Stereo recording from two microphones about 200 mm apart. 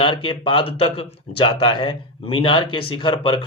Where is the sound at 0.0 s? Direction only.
25° left (ahead or behind).